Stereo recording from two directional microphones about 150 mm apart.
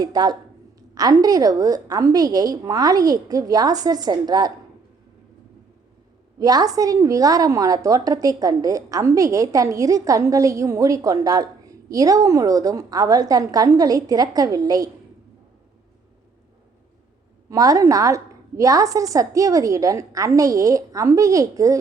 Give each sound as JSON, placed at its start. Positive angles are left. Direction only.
{"t": 0.0, "sound": "a woman's voice", "side_deg": -25}
{"t": 6.4, "sound": "a woman's voice", "side_deg": -25}
{"t": 17.5, "sound": "a woman's voice", "side_deg": -25}